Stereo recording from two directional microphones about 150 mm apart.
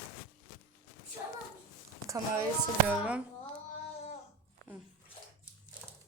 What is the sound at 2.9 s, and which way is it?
Speech, 5° right (ahead or behind).